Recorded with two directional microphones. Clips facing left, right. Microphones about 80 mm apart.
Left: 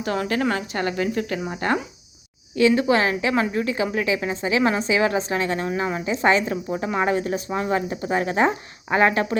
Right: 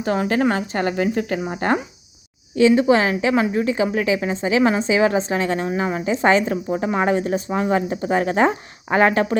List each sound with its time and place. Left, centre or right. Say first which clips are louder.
0.0 s a woman's voice: right 4 dB; right
6.1 s a woman's voice: right 3 dB; right